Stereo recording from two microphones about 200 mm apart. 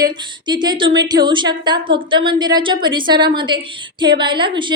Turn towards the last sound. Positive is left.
turn(degrees=-25)  # may be behind; listen again after turning